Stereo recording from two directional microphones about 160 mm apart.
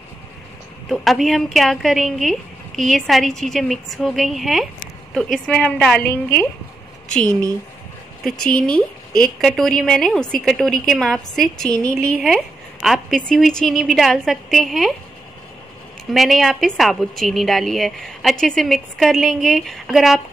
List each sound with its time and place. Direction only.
0.8 s a woman's voice: centre (ahead or behind)
8.2 s a woman's voice: 5° left (ahead or behind)
16.1 s a woman's voice: centre (ahead or behind)